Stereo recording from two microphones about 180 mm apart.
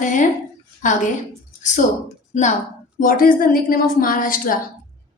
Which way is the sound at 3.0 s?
50° left (ahead or behind).